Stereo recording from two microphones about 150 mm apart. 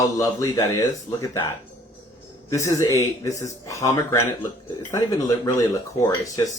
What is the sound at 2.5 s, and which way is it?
Speech, 20° left (ahead or behind).